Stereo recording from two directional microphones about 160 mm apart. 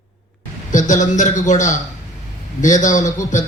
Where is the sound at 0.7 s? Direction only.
50° left (ahead or behind).